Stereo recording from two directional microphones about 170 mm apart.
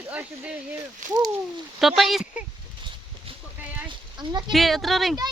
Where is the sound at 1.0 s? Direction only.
50° right (ahead or behind).